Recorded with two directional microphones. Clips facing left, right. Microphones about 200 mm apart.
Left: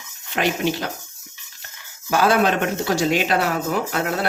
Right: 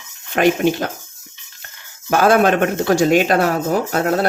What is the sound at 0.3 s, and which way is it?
Speech, 50° right (ahead or behind).